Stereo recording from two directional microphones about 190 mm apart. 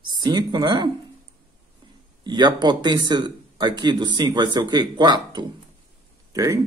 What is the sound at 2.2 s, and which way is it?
Speech, 25° right (ahead or behind).